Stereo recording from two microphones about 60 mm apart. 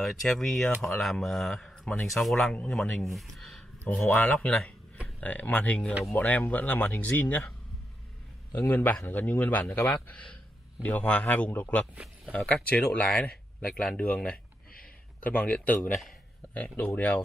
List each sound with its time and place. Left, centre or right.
0.0 s speech: centre
2.5 s speech: centre
3.0 s a sound: centre
4.1 s speech: left
8.5 s a man's voice: left
10.0 s speech: left